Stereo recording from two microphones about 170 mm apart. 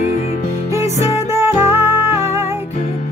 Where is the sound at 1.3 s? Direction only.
15° right (ahead or behind).